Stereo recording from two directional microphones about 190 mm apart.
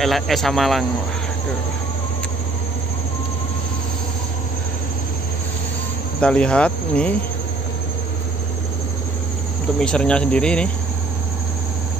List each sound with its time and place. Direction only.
0.0 s speech: centre (ahead or behind)
6.2 s speech: 5° left (ahead or behind)
9.8 s speech: 5° left (ahead or behind)